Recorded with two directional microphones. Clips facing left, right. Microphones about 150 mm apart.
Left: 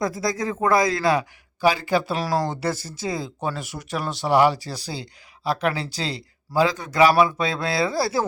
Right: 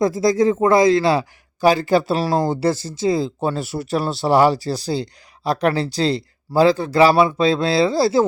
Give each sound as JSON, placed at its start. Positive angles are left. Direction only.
{"t": 0.0, "sound": "speech", "side_deg": -25}
{"t": 1.6, "sound": "speech", "side_deg": -35}